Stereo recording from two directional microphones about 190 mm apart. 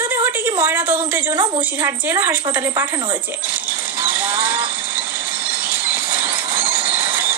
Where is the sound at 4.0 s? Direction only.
10° right (ahead or behind).